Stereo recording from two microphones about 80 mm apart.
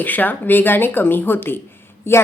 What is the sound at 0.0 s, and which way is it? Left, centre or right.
A woman's voice, left.